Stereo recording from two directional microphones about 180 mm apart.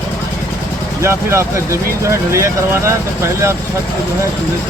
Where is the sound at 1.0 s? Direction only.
15° right (ahead or behind).